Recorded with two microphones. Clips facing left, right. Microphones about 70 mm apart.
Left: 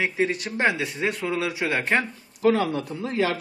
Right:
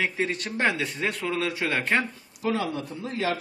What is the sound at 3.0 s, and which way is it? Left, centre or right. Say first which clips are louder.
Speech: left 3 dB; left.